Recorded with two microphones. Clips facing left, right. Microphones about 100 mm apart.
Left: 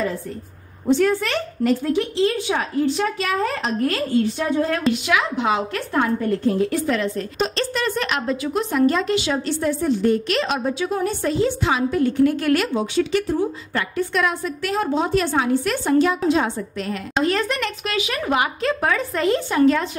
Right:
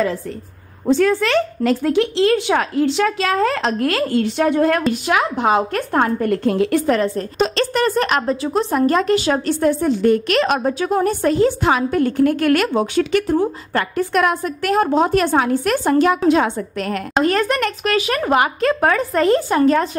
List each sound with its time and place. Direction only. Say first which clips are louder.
1.0 s a woman's voice: right 4 dB; 90° right; by 4.8 s 60° right (ahead or behind)
5.0 s a woman's voice: right 3 dB; 45° right (ahead or behind); by 6.8 s 75° right (ahead or behind)
6.9 s a woman's voice: right 5 dB; 40° right (ahead or behind)
7.3 s a woman's voice: right 6 dB; 90° right
7.7 s a woman's voice: right 6 dB; 45° right (ahead or behind)